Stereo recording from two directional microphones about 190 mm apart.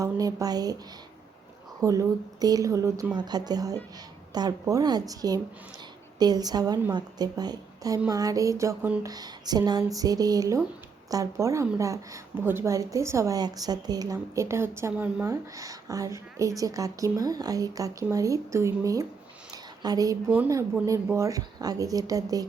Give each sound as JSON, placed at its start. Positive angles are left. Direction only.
{"t": 0.0, "sound": "a woman's voice", "side_deg": -15}
{"t": 1.8, "sound": "a woman's voice", "side_deg": -15}